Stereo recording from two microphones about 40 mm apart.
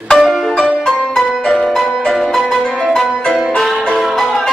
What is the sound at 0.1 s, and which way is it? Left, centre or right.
Music, centre.